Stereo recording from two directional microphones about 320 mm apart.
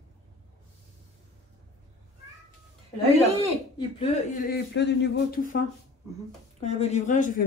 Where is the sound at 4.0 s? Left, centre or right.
Left.